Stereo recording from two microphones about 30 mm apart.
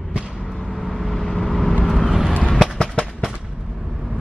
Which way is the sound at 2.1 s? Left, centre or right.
Centre.